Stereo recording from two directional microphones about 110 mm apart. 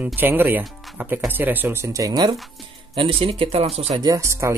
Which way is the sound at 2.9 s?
60° right (ahead or behind).